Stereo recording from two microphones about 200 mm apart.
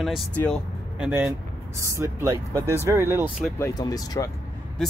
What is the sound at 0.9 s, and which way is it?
Speech, 5° right (ahead or behind).